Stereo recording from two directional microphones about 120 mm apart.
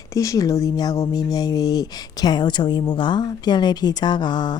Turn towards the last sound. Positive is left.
turn(degrees=40)  # may be behind; listen again after turning